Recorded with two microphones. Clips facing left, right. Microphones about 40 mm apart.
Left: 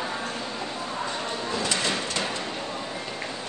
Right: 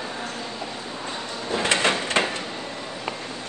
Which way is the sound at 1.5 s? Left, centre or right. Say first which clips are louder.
Right 7 dB; right.